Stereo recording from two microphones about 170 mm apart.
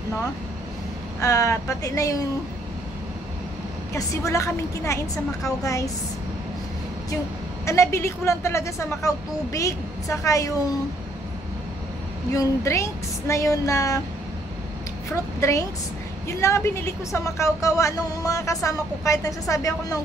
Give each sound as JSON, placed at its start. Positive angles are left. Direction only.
{"t": 1.2, "sound": "a woman's voice", "side_deg": 20}
{"t": 3.9, "sound": "a woman's voice", "side_deg": 15}
{"t": 7.6, "sound": "a woman's voice", "side_deg": 15}
{"t": 12.3, "sound": "a woman's voice", "side_deg": 20}
{"t": 15.0, "sound": "a woman's voice", "side_deg": 20}